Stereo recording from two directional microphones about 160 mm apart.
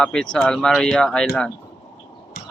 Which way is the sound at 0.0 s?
5° left (ahead or behind).